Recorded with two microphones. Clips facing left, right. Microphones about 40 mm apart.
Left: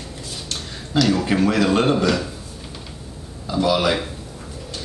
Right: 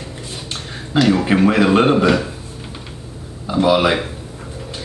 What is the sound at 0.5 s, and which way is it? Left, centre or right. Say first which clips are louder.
A man's voice: right 3 dB; right.